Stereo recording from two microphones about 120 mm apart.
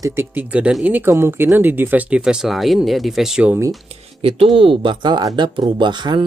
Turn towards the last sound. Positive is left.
turn(degrees=-40)  # may be behind; listen again after turning